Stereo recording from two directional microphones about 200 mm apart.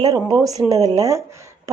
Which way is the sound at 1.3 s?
15° right (ahead or behind).